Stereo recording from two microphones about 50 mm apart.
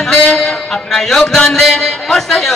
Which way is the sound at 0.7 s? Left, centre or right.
Centre.